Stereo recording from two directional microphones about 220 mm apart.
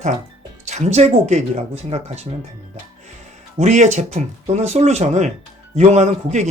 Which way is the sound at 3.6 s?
30° right (ahead or behind).